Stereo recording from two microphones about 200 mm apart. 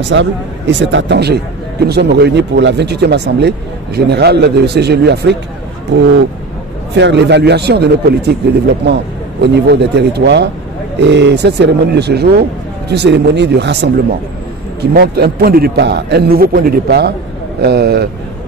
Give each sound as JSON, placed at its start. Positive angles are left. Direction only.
{"t": 0.1, "sound": "speech", "side_deg": -65}
{"t": 7.0, "sound": "speech", "side_deg": -60}
{"t": 9.4, "sound": "a man's voice", "side_deg": -55}